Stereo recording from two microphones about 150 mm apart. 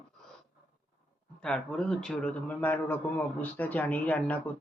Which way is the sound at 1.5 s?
5° left (ahead or behind).